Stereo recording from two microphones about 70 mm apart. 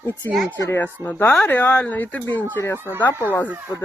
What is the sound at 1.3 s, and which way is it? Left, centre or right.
Speech, left.